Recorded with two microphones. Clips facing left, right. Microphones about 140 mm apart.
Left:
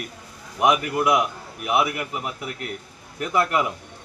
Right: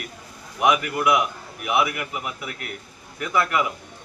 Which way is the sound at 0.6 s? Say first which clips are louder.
Left 1 dB; 35° left (ahead or behind).